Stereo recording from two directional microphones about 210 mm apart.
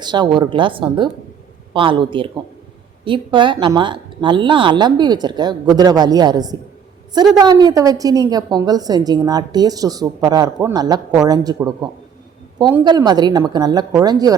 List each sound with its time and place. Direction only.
0.0 s a woman's voice: 20° right (ahead or behind)